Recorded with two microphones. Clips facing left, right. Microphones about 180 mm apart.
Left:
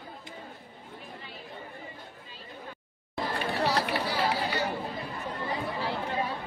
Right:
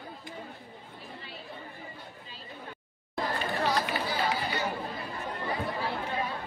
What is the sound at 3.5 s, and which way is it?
Run, 70° left (ahead or behind).